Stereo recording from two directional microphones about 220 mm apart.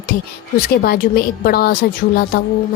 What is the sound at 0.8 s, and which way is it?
A woman's voice, 45° left (ahead or behind).